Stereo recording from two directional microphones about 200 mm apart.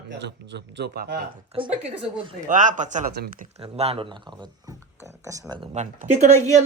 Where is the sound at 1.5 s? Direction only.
25° right (ahead or behind).